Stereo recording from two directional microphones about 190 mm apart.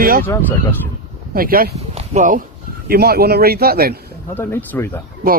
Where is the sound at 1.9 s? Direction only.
35° right (ahead or behind).